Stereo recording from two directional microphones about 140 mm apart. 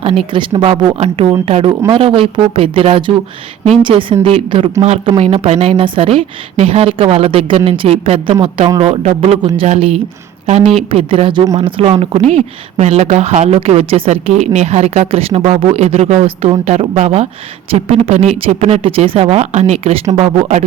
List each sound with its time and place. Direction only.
0.0 s speech: 40° right (ahead or behind)
0.9 s speech: 50° right (ahead or behind)